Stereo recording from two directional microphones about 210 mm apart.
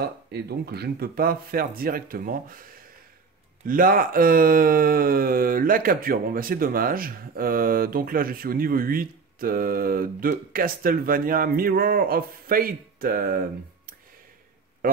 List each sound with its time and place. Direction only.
0.0 s speech: 50° right (ahead or behind)
3.6 s speech: 40° right (ahead or behind)